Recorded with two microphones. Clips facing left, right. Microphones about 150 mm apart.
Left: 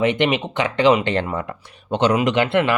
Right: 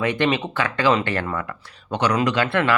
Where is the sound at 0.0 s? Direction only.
20° left (ahead or behind).